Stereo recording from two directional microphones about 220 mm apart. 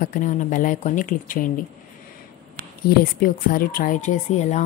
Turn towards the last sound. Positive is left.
turn(degrees=30)  # may be behind; listen again after turning